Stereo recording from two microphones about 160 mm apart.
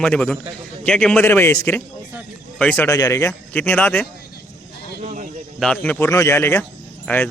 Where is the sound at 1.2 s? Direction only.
15° left (ahead or behind).